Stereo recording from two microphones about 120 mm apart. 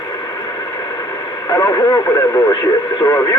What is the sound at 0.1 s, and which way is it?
Speech, 30° left (ahead or behind).